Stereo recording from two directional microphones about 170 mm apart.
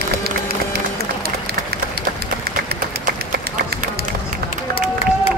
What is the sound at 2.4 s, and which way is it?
Run, 65° right (ahead or behind).